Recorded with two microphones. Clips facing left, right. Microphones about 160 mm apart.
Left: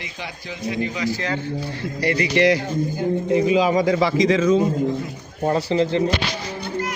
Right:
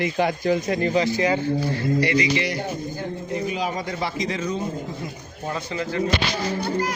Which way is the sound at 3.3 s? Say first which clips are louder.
Left 9 dB; 90° left.